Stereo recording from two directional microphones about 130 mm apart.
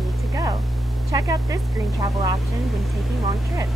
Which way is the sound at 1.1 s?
25° right (ahead or behind).